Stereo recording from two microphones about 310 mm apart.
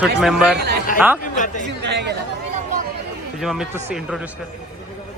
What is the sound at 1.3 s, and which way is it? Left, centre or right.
Speech, left.